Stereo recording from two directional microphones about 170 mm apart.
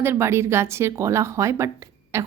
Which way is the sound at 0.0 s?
15° right (ahead or behind).